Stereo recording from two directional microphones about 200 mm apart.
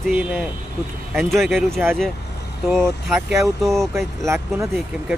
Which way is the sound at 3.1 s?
Centre (ahead or behind).